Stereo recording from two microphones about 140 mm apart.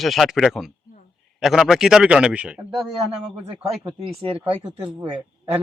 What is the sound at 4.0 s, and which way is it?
Speech, 40° right (ahead or behind).